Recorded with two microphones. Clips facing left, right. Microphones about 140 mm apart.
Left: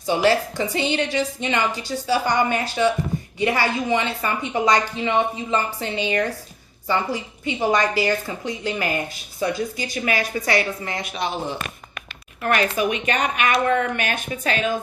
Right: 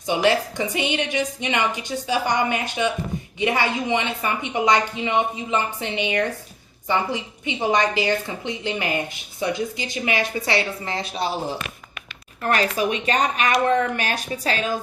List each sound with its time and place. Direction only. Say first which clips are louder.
0.3 s a woman's voice: even; 20° right (ahead or behind); by 14.8 s 35° right (ahead or behind)